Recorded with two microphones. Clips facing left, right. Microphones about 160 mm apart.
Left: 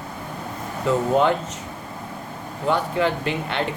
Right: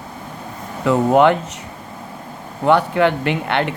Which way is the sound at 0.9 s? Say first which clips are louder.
Right 6 dB; 70° right (ahead or behind).